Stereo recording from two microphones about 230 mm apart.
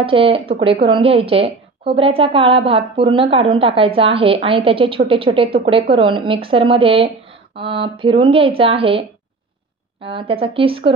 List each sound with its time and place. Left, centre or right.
0.0 s a woman's voice: right
10.0 s a woman's voice: right